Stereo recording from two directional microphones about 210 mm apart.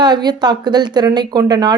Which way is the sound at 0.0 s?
20° right (ahead or behind).